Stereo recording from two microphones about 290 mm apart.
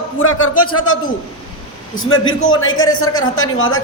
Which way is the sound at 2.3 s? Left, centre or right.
Left.